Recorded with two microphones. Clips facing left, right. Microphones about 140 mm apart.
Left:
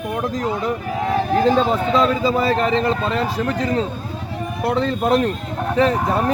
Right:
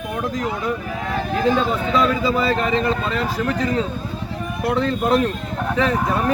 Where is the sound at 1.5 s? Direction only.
30° left (ahead or behind).